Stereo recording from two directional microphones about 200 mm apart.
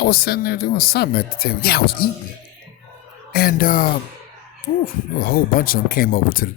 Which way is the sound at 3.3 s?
45° left (ahead or behind).